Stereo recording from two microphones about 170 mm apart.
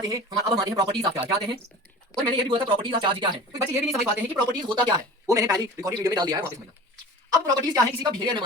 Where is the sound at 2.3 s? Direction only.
30° right (ahead or behind).